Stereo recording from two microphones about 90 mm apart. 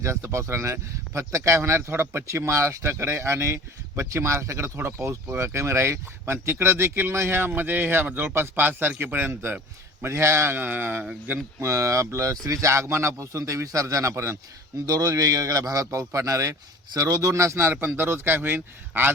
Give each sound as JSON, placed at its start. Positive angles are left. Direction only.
{"t": 0.0, "sound": "speech", "side_deg": -30}
{"t": 11.6, "sound": "speech", "side_deg": -35}